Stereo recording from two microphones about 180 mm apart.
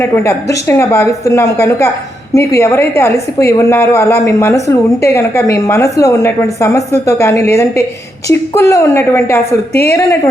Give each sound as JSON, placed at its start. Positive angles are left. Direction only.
{"t": 0.0, "sound": "a woman's voice", "side_deg": 15}